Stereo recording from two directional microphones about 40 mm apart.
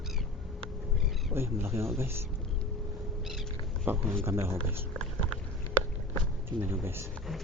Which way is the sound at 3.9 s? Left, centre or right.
Right.